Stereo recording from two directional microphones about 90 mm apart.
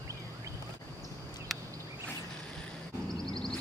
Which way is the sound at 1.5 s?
Centre (ahead or behind).